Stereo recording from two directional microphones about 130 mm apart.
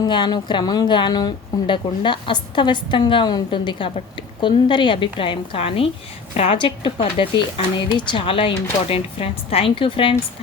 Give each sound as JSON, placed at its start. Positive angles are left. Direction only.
{"t": 0.0, "sound": "a woman's voice", "side_deg": 35}